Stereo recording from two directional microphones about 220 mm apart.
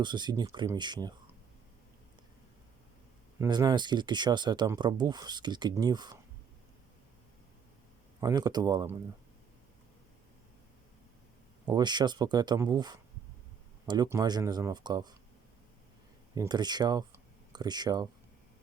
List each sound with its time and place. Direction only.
0.0 s speech: 20° right (ahead or behind)
3.3 s speech: 15° right (ahead or behind)
8.2 s speech: 15° right (ahead or behind)
11.7 s speech: 20° right (ahead or behind)
16.3 s speech: 20° right (ahead or behind)